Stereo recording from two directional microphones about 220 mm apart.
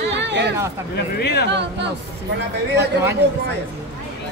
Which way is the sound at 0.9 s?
50° left (ahead or behind).